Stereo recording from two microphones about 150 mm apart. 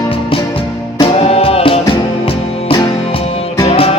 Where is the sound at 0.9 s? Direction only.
40° left (ahead or behind).